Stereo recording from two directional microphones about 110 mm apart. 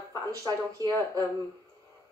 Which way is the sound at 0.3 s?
35° right (ahead or behind).